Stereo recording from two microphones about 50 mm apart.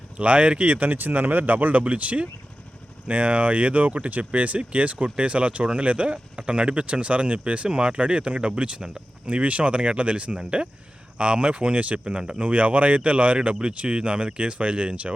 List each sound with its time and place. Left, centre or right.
0.2 s speech: right